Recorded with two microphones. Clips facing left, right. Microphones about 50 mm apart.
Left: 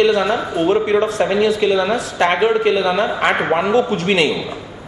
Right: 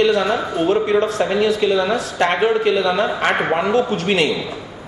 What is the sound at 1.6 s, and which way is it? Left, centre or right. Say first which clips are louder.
Speech: left 1 dB; centre.